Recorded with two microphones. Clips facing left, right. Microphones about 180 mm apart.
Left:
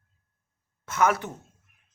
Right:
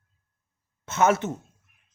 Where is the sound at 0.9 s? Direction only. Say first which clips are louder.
Right 2 dB; 25° right (ahead or behind).